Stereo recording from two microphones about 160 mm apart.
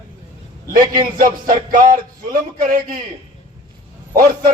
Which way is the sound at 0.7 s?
60° right (ahead or behind).